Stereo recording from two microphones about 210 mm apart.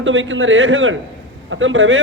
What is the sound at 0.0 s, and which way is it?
A man's voice, 65° right (ahead or behind).